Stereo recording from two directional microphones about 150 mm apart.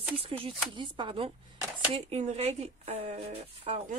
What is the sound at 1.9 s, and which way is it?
Speech, 50° right (ahead or behind).